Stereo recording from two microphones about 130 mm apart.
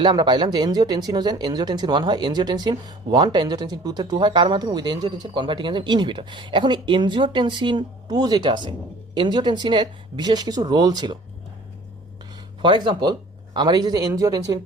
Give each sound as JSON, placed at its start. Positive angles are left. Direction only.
{"t": 0.0, "sound": "speech", "side_deg": -35}
{"t": 12.6, "sound": "speech", "side_deg": -35}